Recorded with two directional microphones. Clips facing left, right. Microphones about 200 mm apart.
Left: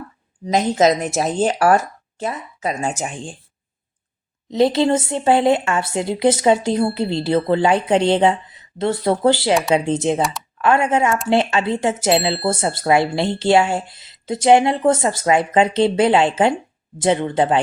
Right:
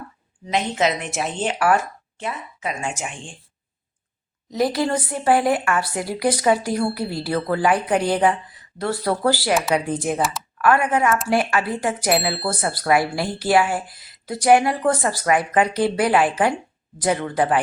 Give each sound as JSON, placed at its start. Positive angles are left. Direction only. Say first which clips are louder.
{"t": 0.4, "sound": "speech", "louder": "left 6 dB", "side_deg": 40}
{"t": 4.5, "sound": "a woman's voice", "louder": "left 5 dB", "side_deg": 25}